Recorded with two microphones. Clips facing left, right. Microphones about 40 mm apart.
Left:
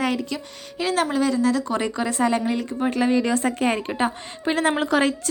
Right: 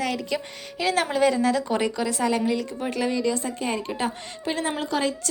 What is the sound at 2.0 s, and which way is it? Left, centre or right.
A woman's voice, centre.